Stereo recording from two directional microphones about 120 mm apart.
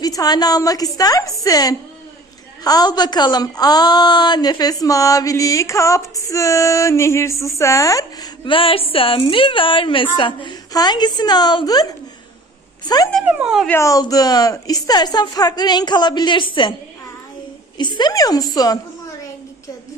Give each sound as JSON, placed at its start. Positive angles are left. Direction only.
{"t": 0.0, "sound": "a woman's voice", "side_deg": 30}
{"t": 8.4, "sound": "a woman's voice", "side_deg": 50}
{"t": 13.2, "sound": "speech", "side_deg": -5}
{"t": 13.7, "sound": "a woman's voice", "side_deg": 25}
{"t": 17.7, "sound": "a woman's voice", "side_deg": 40}